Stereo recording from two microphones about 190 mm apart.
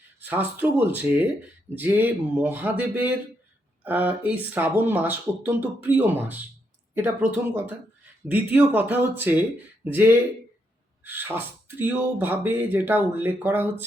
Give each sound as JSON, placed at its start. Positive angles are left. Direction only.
{"t": 0.2, "sound": "speech", "side_deg": -10}